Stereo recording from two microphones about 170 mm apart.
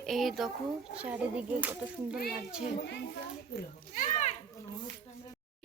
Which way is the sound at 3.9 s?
50° left (ahead or behind).